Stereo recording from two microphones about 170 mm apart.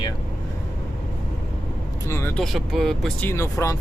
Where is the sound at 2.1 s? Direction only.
15° left (ahead or behind).